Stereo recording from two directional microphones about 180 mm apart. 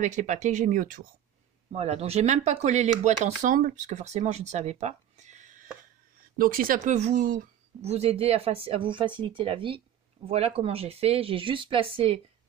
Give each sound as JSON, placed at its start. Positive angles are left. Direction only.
{"t": 0.0, "sound": "speech", "side_deg": -40}
{"t": 1.7, "sound": "speech", "side_deg": -35}